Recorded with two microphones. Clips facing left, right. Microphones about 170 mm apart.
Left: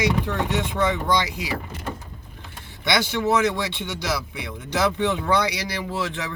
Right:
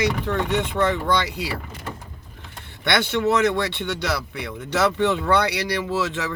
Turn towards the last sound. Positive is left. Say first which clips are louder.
# right 4 dB
turn(degrees=-70)  # may be behind; listen again after turning